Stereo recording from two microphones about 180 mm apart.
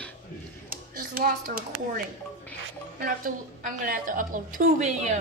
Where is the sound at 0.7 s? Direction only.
55° right (ahead or behind).